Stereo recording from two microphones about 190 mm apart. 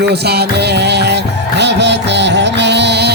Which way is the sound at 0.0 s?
60° right (ahead or behind).